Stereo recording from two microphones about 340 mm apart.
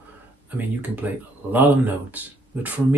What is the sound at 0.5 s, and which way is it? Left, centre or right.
Speech, centre.